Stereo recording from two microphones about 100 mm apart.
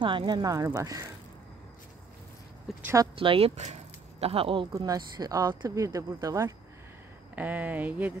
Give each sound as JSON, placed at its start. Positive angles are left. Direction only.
{"t": 0.0, "sound": "speech", "side_deg": -55}
{"t": 3.2, "sound": "speech", "side_deg": -70}
{"t": 4.7, "sound": "speech", "side_deg": -35}
{"t": 7.3, "sound": "speech", "side_deg": -15}